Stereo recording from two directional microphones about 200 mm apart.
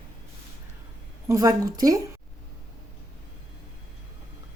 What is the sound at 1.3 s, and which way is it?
Speech, 15° right (ahead or behind).